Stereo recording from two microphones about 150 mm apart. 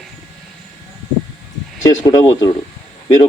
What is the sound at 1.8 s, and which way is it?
Speech, 25° left (ahead or behind).